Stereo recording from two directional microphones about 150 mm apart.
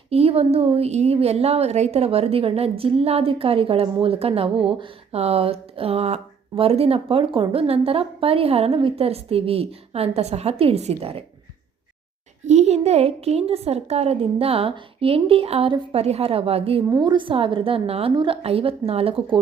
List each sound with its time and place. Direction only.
0.1 s a woman's voice: 40° right (ahead or behind)
12.5 s a woman's voice: 45° right (ahead or behind)
16.9 s a woman's voice: 30° right (ahead or behind)